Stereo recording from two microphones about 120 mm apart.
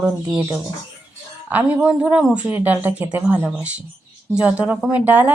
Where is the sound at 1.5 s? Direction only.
10° right (ahead or behind).